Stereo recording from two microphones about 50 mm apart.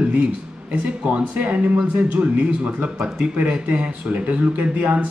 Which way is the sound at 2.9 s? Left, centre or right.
Centre.